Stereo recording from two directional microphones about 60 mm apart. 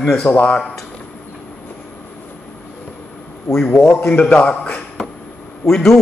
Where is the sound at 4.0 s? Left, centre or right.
Left.